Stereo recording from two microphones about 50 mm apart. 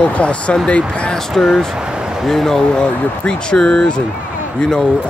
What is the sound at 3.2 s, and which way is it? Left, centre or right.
Speech, centre.